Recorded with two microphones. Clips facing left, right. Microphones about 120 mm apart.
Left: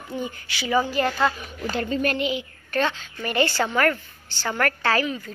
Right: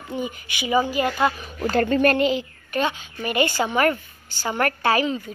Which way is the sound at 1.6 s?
50° right (ahead or behind).